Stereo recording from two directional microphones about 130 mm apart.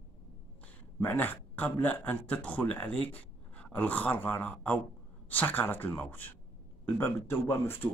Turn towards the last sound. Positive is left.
turn(degrees=20)  # may be behind; listen again after turning